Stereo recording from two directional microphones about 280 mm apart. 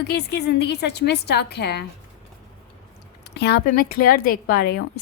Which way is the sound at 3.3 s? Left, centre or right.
Left.